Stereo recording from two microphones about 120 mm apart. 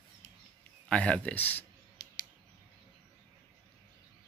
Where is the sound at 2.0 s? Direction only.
30° left (ahead or behind).